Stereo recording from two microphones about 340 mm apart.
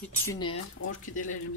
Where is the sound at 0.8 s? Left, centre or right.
Left.